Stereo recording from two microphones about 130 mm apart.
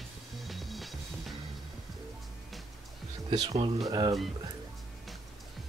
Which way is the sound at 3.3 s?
30° right (ahead or behind).